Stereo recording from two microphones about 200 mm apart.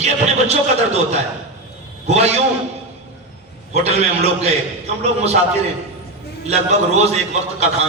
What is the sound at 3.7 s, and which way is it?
A man's voice, 30° right (ahead or behind).